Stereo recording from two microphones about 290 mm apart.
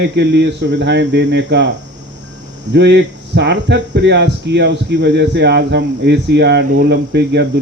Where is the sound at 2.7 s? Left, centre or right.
Right.